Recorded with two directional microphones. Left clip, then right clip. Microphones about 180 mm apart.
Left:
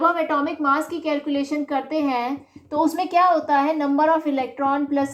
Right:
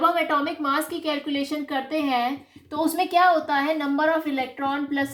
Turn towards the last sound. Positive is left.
turn(degrees=-10)  # may be behind; listen again after turning